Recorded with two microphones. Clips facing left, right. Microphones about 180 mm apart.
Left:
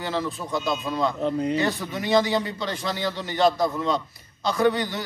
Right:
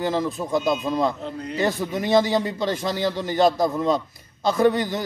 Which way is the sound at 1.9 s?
45° right (ahead or behind).